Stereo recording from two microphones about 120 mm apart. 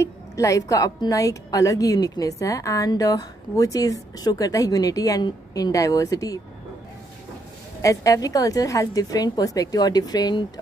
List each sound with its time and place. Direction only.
0.0 s a woman's voice: 25° left (ahead or behind)
7.8 s a woman's voice: 30° left (ahead or behind)